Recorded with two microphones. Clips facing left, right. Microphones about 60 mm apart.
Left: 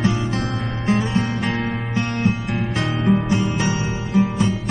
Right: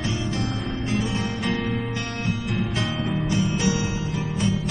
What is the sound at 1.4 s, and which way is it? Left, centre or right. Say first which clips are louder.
Music: left 2 dB; left.